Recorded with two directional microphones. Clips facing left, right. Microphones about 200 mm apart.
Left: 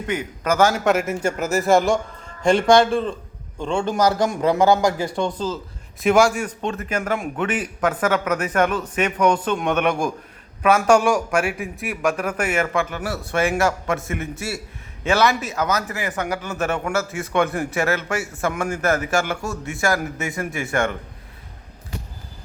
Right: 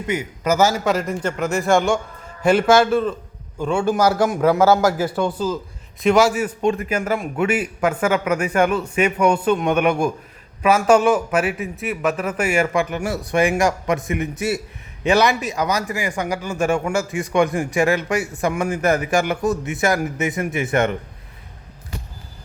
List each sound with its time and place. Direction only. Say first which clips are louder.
0.1 s a man's voice: right 2 dB; 10° right (ahead or behind)